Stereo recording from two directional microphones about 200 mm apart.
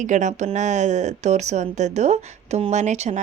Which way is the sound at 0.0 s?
40° right (ahead or behind).